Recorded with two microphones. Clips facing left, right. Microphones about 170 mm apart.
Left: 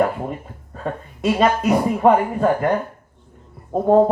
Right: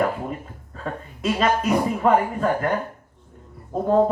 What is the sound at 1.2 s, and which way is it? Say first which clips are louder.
Speech: left 4 dB; 60° left (ahead or behind).